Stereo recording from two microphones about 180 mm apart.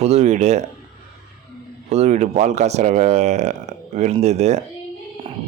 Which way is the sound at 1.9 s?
40° right (ahead or behind).